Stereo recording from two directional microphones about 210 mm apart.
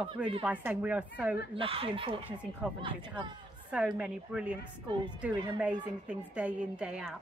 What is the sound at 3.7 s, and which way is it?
Speech, 5° right (ahead or behind).